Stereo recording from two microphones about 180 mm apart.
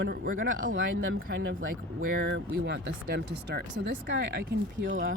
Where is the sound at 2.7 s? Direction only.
65° right (ahead or behind).